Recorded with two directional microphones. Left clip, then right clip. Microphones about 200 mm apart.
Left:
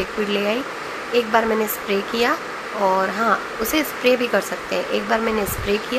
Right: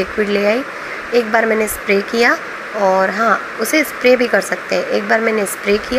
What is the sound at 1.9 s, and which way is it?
Speech, 25° right (ahead or behind).